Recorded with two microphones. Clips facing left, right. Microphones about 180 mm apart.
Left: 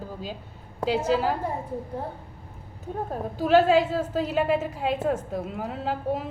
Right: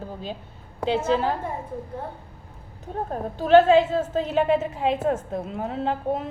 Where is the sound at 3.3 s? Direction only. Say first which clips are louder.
Right 4 dB; 5° left (ahead or behind).